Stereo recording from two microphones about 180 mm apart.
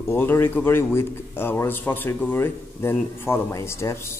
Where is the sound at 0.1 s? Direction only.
10° left (ahead or behind).